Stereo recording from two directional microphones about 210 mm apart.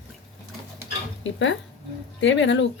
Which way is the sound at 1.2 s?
60° left (ahead or behind).